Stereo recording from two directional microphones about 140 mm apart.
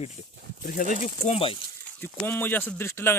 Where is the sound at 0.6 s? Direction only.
75° left (ahead or behind).